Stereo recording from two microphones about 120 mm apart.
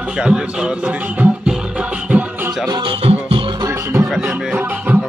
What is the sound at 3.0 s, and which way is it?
Music, 50° right (ahead or behind).